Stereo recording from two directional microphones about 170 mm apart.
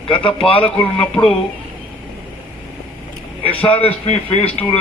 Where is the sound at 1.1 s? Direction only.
5° left (ahead or behind).